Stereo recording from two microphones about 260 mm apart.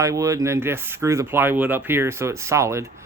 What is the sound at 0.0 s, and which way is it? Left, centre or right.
Speech, centre.